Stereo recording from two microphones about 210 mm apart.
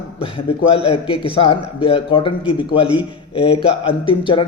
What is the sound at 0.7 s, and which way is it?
A man's voice, 25° left (ahead or behind).